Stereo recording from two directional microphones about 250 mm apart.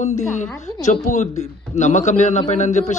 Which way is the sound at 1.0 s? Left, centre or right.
Left.